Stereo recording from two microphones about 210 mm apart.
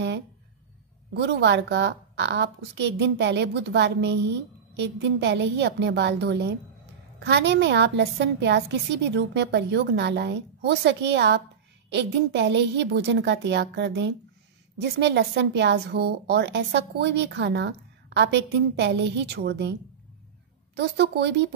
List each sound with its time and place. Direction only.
1.1 s a woman's voice: 55° right (ahead or behind)
20.7 s a woman's voice: 55° right (ahead or behind)